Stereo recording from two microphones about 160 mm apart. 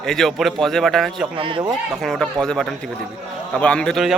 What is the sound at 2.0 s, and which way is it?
A man's voice, centre (ahead or behind).